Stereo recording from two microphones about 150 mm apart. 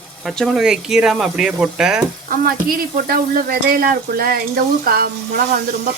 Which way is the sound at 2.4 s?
75° right (ahead or behind).